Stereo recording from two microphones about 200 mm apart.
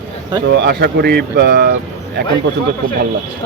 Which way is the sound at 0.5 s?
60° right (ahead or behind).